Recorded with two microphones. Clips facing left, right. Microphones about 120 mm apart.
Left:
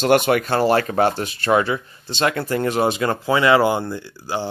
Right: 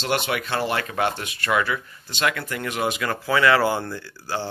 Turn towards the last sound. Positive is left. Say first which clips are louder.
# left 3 dB
turn(degrees=15)  # may be behind; listen again after turning